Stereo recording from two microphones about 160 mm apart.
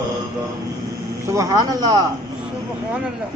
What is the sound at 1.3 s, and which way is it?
Speech, 20° right (ahead or behind).